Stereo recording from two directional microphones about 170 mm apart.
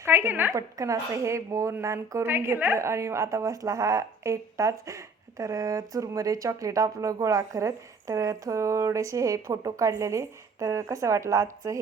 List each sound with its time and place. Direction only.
0.0 s a woman's voice: 15° right (ahead or behind)